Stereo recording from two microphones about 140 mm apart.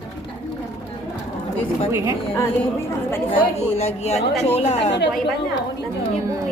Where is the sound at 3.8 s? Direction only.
50° left (ahead or behind).